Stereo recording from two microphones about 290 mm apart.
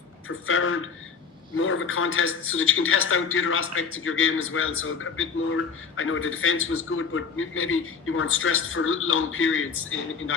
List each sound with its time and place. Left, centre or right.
0.3 s a man's voice: left